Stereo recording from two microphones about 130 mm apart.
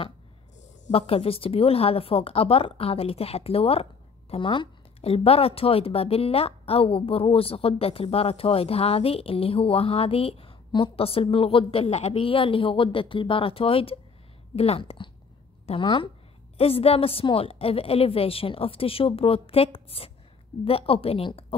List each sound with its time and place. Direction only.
0.9 s a woman's voice: 50° left (ahead or behind)